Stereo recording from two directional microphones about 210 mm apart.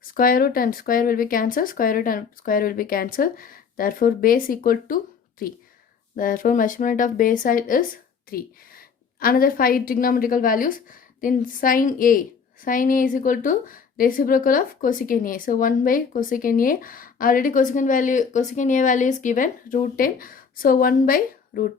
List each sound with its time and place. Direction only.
0.1 s a woman's voice: 45° left (ahead or behind)